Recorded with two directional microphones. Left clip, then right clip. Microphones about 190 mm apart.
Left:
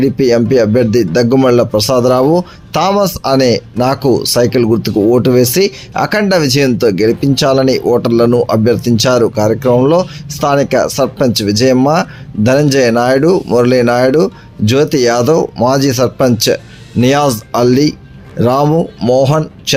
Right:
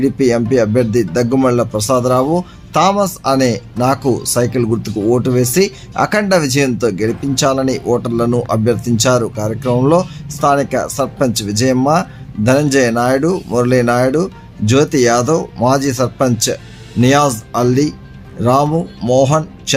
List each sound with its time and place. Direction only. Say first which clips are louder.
0.0 s speech: left 3 dB; 15° left (ahead or behind)